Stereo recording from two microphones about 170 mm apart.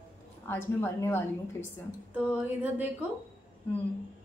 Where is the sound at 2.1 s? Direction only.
10° right (ahead or behind).